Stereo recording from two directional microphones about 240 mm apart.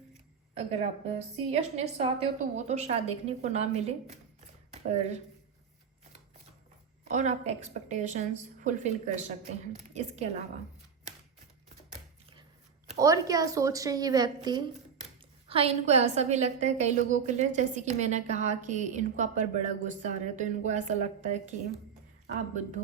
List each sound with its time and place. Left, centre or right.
0.5 s a woman's voice: right
7.1 s a woman's voice: right
13.0 s a woman's voice: centre; by 21.5 s right